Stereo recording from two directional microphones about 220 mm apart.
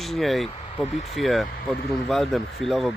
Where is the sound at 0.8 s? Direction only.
30° left (ahead or behind).